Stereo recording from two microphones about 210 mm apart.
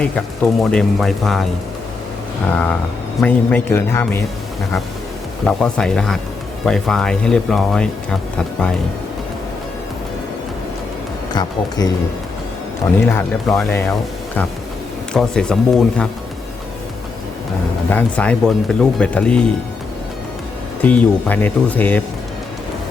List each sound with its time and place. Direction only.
0.6 s speech: centre (ahead or behind)
2.5 s speech: 5° left (ahead or behind)
5.5 s speech: 5° left (ahead or behind)
11.3 s speech: 20° left (ahead or behind)
13.1 s speech: 10° left (ahead or behind)
15.1 s speech: 5° left (ahead or behind)
17.8 s speech: 5° left (ahead or behind)
20.8 s speech: 5° left (ahead or behind)